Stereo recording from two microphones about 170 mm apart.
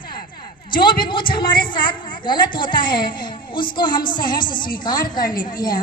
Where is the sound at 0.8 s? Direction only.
25° left (ahead or behind).